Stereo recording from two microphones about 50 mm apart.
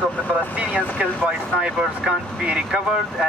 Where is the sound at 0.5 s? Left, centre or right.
Right.